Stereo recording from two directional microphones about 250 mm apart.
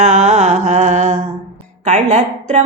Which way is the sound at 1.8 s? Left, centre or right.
Right.